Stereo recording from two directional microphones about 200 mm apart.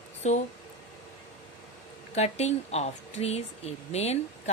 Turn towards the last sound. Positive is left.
turn(degrees=30)  # may be behind; listen again after turning